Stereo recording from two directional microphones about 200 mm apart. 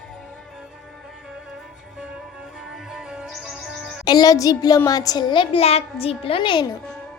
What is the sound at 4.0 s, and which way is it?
A child's voice, 20° left (ahead or behind).